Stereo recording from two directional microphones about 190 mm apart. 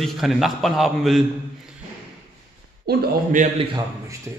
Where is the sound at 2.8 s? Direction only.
45° right (ahead or behind).